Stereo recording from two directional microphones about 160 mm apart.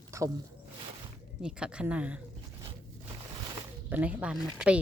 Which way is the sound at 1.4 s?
5° right (ahead or behind).